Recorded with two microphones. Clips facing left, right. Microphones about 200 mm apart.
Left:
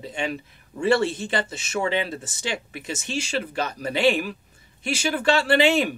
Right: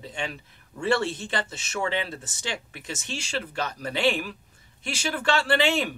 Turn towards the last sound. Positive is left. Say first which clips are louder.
# left 4 dB
turn(degrees=10)  # may be behind; listen again after turning